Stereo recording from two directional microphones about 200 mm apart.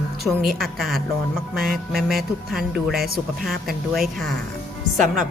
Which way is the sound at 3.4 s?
Centre (ahead or behind).